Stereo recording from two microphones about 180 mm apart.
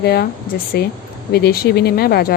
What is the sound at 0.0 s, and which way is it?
Speech, 60° left (ahead or behind).